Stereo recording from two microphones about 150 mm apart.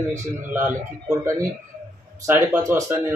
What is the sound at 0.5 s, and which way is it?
Speech, 15° right (ahead or behind).